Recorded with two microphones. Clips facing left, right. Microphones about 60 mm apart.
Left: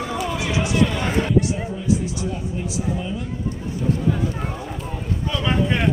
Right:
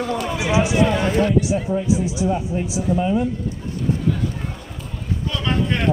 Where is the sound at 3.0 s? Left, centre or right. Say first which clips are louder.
Right 9 dB; right.